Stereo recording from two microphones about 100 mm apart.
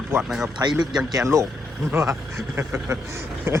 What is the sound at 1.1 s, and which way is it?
Speech, 30° right (ahead or behind).